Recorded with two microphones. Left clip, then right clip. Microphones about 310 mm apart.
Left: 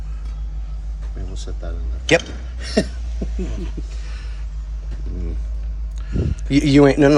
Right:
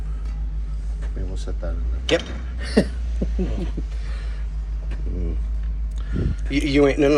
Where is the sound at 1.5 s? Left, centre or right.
Centre.